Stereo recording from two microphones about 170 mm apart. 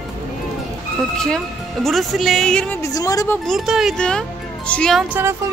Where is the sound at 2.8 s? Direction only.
20° left (ahead or behind).